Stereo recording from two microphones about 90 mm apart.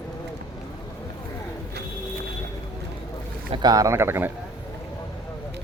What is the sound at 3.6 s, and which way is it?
Speech, 40° right (ahead or behind).